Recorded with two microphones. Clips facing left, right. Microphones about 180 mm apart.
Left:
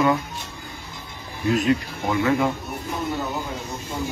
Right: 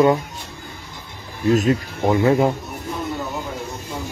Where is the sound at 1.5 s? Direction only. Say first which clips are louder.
Right 3 dB; 35° right (ahead or behind).